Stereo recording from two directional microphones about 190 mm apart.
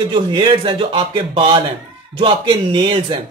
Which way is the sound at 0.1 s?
25° right (ahead or behind).